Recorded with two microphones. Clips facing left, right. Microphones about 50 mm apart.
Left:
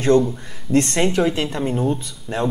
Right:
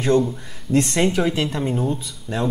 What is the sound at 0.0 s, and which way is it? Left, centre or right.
A man's voice, centre.